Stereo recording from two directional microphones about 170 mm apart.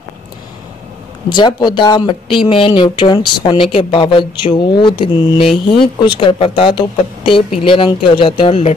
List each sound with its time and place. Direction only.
1.3 s speech: 25° left (ahead or behind)